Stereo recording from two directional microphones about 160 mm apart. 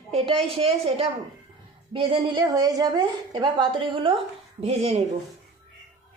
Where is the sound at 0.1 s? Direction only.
35° right (ahead or behind).